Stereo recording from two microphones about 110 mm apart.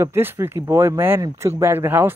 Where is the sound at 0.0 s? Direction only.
25° right (ahead or behind).